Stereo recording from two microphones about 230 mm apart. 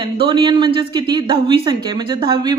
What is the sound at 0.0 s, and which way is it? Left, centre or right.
A woman's voice, right.